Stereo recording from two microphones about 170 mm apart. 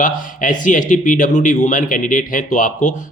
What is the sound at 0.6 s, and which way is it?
Speech, 50° left (ahead or behind).